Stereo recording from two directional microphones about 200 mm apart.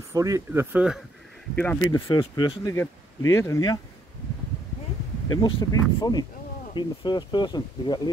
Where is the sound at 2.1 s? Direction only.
25° left (ahead or behind).